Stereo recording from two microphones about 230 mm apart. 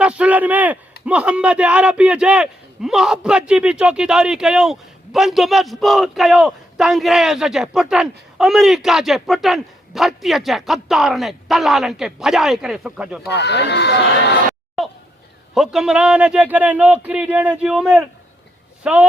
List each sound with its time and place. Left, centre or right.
0.0 s a man's voice: centre
13.3 s speech: left
14.8 s a man's voice: centre